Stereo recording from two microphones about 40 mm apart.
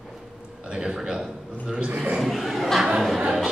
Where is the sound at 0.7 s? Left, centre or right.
Centre.